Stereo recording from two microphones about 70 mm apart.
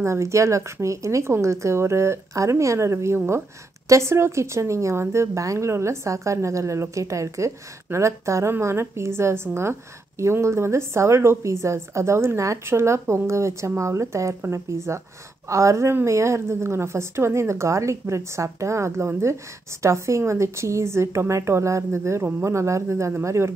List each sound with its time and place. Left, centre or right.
0.0 s a woman's voice: right